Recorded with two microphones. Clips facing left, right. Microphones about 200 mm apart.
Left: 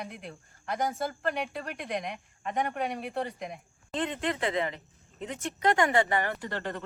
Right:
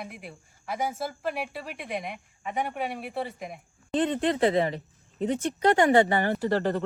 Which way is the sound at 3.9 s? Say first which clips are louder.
Right 6 dB; 35° right (ahead or behind).